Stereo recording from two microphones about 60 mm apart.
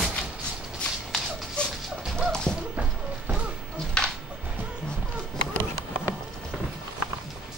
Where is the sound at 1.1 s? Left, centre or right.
Centre.